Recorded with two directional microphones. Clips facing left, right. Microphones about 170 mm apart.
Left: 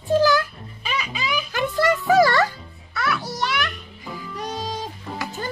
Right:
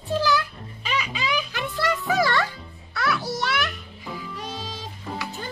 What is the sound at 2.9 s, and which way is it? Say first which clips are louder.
Music: even; centre (ahead or behind).